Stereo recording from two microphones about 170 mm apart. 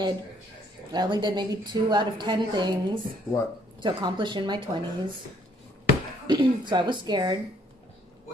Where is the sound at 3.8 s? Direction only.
25° right (ahead or behind).